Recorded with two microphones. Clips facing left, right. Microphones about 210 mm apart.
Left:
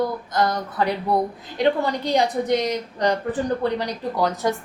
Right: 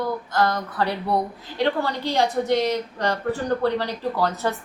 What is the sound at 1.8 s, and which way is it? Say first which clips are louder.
A woman's voice: left 2 dB; 15° left (ahead or behind).